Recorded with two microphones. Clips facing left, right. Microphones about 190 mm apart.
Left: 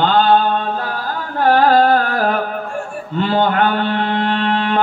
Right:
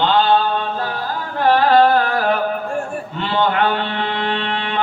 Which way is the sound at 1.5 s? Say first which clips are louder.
Left 1 dB; 45° left (ahead or behind).